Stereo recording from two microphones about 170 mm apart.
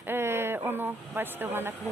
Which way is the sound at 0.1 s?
15° right (ahead or behind).